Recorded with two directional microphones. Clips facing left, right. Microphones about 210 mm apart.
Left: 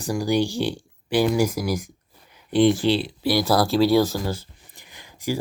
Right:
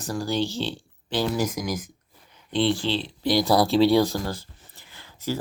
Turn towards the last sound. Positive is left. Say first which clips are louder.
# left 2 dB
turn(degrees=15)  # may be behind; listen again after turning